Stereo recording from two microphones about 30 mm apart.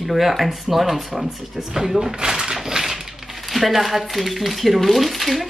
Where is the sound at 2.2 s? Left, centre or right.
Right.